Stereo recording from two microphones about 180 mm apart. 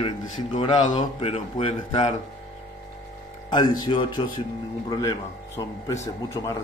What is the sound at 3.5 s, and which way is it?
Speech, 25° left (ahead or behind).